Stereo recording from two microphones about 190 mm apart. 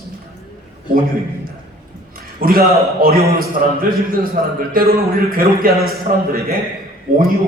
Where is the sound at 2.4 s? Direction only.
50° right (ahead or behind).